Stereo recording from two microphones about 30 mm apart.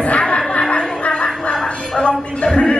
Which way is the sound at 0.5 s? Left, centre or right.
Left.